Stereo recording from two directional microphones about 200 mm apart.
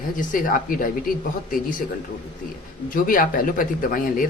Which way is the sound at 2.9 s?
45° left (ahead or behind).